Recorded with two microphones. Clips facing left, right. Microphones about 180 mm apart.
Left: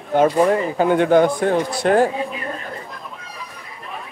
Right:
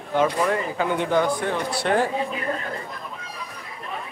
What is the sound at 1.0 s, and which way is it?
Speech, 50° left (ahead or behind).